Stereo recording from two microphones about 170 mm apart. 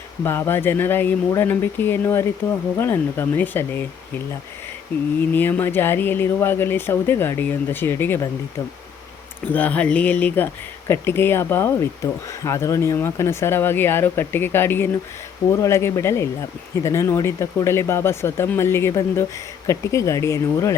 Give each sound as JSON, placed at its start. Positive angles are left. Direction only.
{"t": 0.3, "sound": "speech", "side_deg": 15}
{"t": 5.3, "sound": "speech", "side_deg": 10}
{"t": 9.5, "sound": "speech", "side_deg": 10}